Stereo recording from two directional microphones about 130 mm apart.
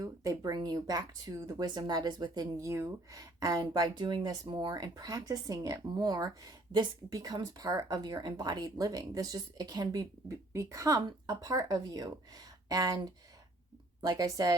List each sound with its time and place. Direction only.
0.0 s speech: 25° right (ahead or behind)